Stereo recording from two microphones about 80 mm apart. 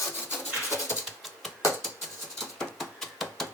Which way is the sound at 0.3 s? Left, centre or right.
Left.